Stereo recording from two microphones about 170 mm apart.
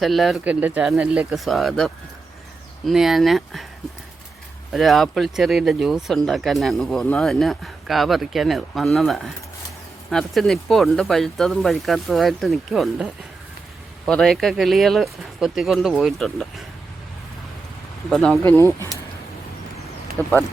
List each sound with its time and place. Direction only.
0.0 s speech: centre (ahead or behind)
4.7 s speech: centre (ahead or behind)
14.1 s speech: centre (ahead or behind)
18.1 s speech: centre (ahead or behind)
18.4 s speech: 15° left (ahead or behind)
20.2 s speech: 10° left (ahead or behind)